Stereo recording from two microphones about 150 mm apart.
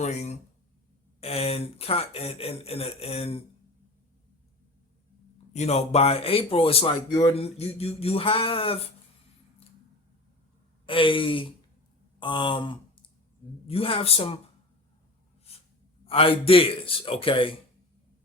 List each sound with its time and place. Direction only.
0.0 s speech: 45° left (ahead or behind)
5.5 s speech: 45° left (ahead or behind)
7.1 s speech: 25° left (ahead or behind)
7.3 s speech: 40° left (ahead or behind)
10.8 s speech: 35° left (ahead or behind)
12.2 s a sound: 30° left (ahead or behind)
13.7 s speech: 40° left (ahead or behind)
16.0 s speech: 40° left (ahead or behind)